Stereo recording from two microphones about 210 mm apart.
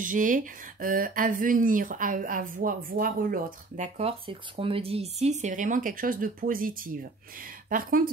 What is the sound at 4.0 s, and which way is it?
Speech, 30° right (ahead or behind).